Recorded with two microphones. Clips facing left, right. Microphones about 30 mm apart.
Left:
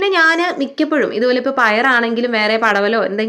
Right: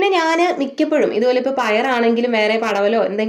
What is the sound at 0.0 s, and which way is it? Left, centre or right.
Speech, left.